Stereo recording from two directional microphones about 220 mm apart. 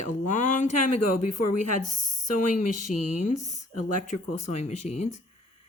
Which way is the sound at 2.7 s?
90° left.